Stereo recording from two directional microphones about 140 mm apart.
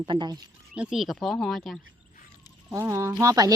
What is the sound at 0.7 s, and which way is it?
Speech, centre (ahead or behind).